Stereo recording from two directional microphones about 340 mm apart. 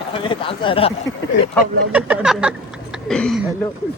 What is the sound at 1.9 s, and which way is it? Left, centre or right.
Speech, centre.